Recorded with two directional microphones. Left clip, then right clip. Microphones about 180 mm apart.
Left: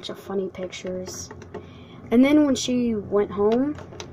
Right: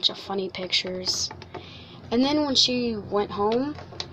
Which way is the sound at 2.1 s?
15° left (ahead or behind).